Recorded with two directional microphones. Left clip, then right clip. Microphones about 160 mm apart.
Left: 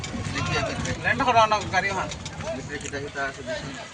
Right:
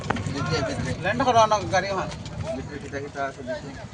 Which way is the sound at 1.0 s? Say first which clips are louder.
Even; 90° right.